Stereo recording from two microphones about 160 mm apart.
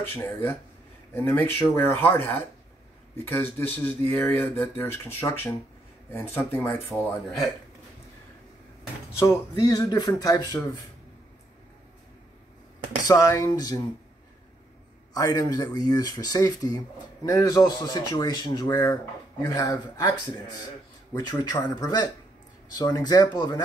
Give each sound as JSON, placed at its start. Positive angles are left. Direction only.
{"t": 0.1, "sound": "speech", "side_deg": 15}
{"t": 3.5, "sound": "speech", "side_deg": 10}
{"t": 9.2, "sound": "speech", "side_deg": 20}
{"t": 13.0, "sound": "speech", "side_deg": 20}
{"t": 15.1, "sound": "speech", "side_deg": 20}